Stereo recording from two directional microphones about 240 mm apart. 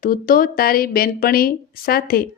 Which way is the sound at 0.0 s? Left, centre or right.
Left.